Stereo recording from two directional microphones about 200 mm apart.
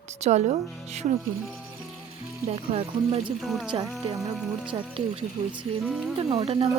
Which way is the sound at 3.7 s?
25° right (ahead or behind).